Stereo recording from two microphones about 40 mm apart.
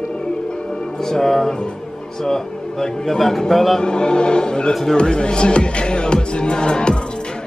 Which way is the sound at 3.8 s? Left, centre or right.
Left.